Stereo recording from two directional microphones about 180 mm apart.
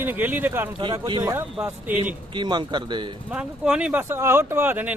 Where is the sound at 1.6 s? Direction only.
10° right (ahead or behind).